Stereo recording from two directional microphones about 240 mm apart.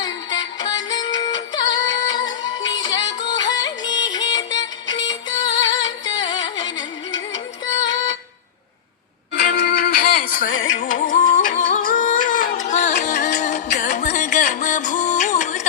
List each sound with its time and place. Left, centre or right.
0.0 s music: centre
9.3 s music: left